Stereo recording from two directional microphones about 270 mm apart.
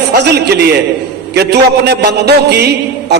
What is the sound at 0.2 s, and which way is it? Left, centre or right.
A man's voice, right.